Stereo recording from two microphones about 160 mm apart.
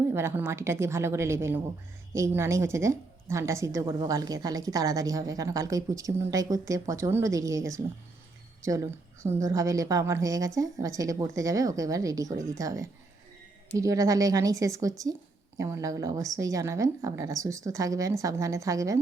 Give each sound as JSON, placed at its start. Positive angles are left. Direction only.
{"t": 0.1, "sound": "a woman's voice", "side_deg": -15}